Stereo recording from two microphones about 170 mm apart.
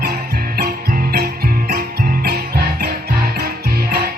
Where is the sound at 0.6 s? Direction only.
60° right (ahead or behind).